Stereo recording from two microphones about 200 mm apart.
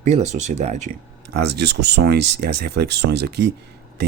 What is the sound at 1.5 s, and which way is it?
Speech, 55° right (ahead or behind).